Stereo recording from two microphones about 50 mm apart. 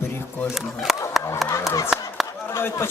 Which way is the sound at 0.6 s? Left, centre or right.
Centre.